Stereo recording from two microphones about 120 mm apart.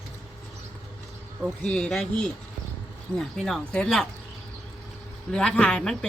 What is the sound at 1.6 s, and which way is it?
Speech, 5° left (ahead or behind).